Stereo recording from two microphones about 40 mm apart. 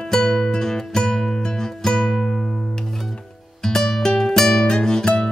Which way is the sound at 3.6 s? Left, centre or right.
Centre.